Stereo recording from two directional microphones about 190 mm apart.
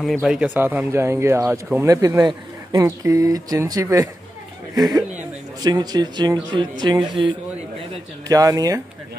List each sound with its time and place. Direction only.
0.0 s speech: centre (ahead or behind); by 8.8 s 20° right (ahead or behind)